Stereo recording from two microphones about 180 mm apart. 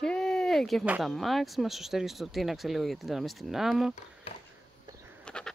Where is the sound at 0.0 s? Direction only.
5° left (ahead or behind).